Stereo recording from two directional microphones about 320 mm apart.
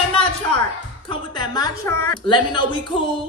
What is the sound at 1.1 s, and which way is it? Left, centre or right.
A woman's voice, centre.